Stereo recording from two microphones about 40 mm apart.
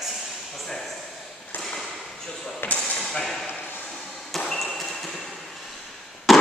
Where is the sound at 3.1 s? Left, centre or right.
Centre.